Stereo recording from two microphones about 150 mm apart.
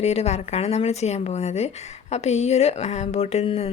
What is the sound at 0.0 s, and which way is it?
Speech, 45° left (ahead or behind).